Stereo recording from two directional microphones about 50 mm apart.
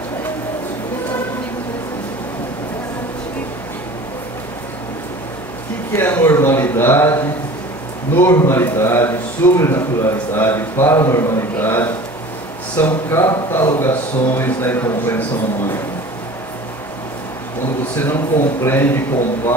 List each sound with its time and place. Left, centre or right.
5.9 s a sound: left
8.4 s a man's voice: left
11.5 s a man's voice: left
17.9 s a man's voice: left